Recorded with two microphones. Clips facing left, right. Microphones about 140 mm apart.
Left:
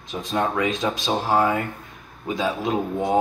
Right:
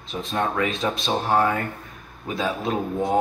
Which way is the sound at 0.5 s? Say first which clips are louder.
Left 1 dB; 15° left (ahead or behind).